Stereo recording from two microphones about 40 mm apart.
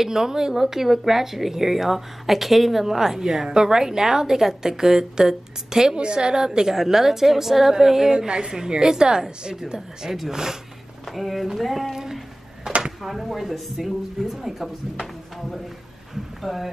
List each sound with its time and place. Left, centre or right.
0.0 s speech: centre
9.8 s a woman's voice: centre
11.1 s a woman's voice: centre
11.9 s speech: centre
12.7 s a sound: centre
13.0 s a woman's voice: centre
16.4 s a woman's voice: centre